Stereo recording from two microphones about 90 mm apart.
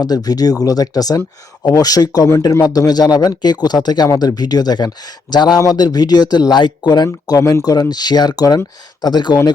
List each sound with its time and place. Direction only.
0.0 s a man's voice: 45° left (ahead or behind)